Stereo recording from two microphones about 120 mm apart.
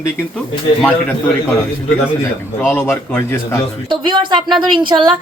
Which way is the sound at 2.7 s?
20° left (ahead or behind).